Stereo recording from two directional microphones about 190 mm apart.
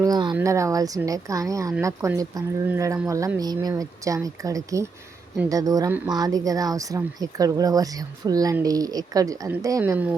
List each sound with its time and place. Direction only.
0.0 s speech: 20° right (ahead or behind)